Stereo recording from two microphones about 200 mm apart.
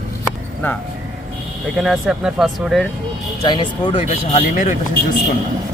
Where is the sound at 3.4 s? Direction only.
25° left (ahead or behind).